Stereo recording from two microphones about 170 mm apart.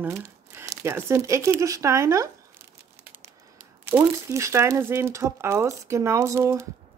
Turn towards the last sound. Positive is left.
turn(degrees=-15)  # may be behind; listen again after turning